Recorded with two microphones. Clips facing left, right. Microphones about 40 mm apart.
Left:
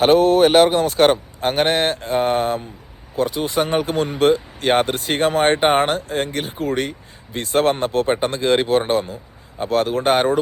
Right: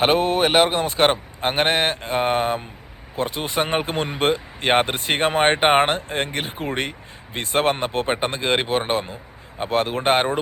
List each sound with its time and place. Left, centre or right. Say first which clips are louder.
0.0 s speech: left 5 dB; right